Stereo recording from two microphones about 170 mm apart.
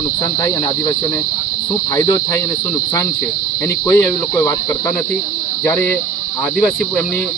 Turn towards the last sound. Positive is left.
turn(degrees=10)  # may be behind; listen again after turning